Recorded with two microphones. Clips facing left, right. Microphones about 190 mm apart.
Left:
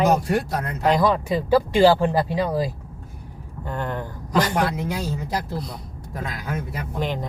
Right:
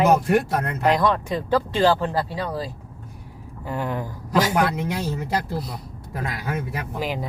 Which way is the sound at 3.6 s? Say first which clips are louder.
Right 1 dB; 5° right (ahead or behind).